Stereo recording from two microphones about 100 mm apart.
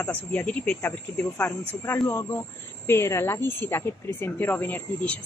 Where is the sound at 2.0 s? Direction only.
30° left (ahead or behind).